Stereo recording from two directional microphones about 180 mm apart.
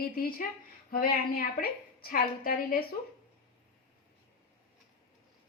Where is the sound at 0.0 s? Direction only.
55° left (ahead or behind).